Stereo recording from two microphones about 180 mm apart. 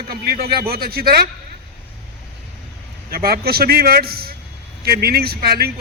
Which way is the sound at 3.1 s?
55° right (ahead or behind).